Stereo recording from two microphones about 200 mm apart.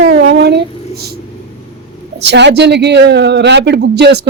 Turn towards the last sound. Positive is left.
turn(degrees=-55)  # may be behind; listen again after turning